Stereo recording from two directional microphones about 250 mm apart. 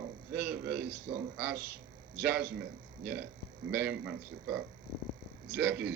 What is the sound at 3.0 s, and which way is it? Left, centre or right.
A man's voice, right.